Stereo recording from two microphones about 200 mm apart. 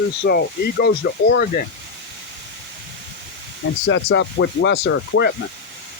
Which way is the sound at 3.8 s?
65° left (ahead or behind).